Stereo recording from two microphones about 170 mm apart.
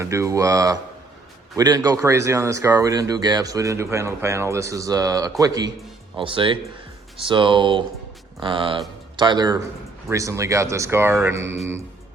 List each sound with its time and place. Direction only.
0.0 s speech: 15° right (ahead or behind)